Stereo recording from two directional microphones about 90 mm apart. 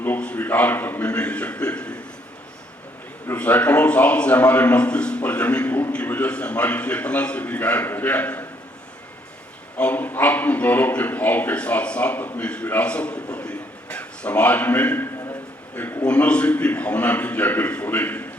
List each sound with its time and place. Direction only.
0.2 s a man's voice: 15° left (ahead or behind)
3.3 s a man's voice: 15° left (ahead or behind)
9.7 s a man's voice: 20° left (ahead or behind)